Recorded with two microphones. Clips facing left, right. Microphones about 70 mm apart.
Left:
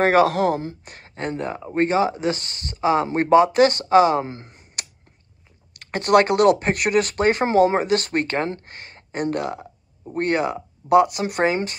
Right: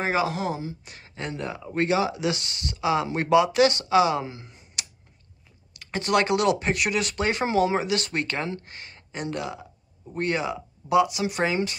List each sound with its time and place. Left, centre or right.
0.0 s speech: left